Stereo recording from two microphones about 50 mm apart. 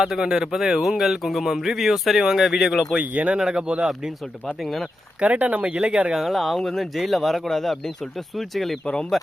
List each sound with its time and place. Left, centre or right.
0.0 s speech: centre
3.0 s speech: right
3.3 s speech: centre
4.6 s speech: centre
5.2 s speech: right
6.1 s speech: centre